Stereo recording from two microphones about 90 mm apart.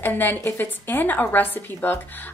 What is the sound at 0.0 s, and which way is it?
A woman's voice, 20° left (ahead or behind).